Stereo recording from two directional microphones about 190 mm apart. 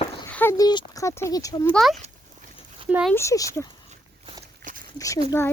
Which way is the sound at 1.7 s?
Centre (ahead or behind).